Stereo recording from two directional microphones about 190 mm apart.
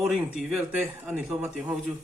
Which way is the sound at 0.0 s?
5° right (ahead or behind).